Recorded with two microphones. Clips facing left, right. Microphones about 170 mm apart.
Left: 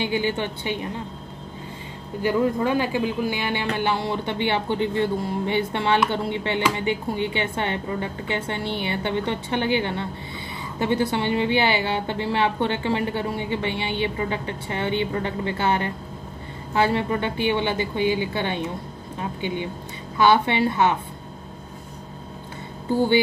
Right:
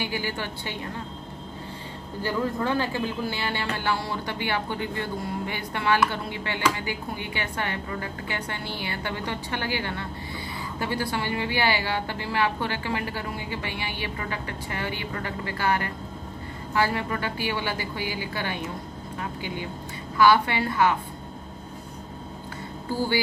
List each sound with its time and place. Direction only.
0.0 s a woman's voice: 20° left (ahead or behind)
2.2 s a woman's voice: 15° left (ahead or behind)
22.8 s a woman's voice: 20° left (ahead or behind)